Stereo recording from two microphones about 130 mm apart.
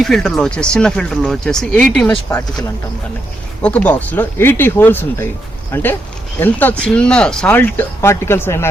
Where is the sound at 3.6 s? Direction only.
10° left (ahead or behind).